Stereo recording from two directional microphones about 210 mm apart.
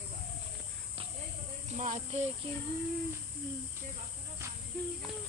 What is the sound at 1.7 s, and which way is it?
Speech, 35° right (ahead or behind).